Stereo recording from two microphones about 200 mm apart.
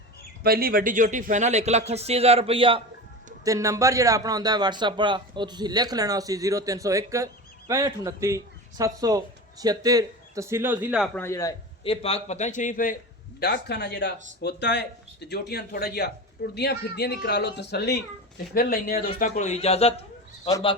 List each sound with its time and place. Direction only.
0.4 s speech: 50° right (ahead or behind); by 2.8 s 25° right (ahead or behind)
3.4 s a man's voice: 15° right (ahead or behind)
11.0 s a man's voice: 10° left (ahead or behind)
11.8 s a man's voice: 30° left (ahead or behind)
13.4 s speech: 55° left (ahead or behind)
19.2 s a man's voice: 35° left (ahead or behind)